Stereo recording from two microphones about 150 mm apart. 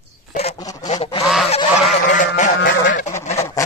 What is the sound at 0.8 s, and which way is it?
Goose, 45° left (ahead or behind).